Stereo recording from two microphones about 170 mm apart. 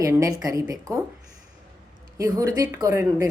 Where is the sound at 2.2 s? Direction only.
20° right (ahead or behind).